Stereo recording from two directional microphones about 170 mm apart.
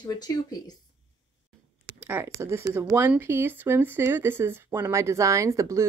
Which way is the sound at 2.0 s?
10° right (ahead or behind).